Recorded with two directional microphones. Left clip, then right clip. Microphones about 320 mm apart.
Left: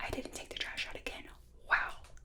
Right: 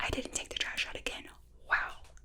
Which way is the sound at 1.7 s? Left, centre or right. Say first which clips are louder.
Even; centre.